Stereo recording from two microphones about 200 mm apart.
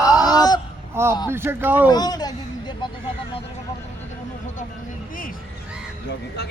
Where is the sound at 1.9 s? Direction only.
20° left (ahead or behind).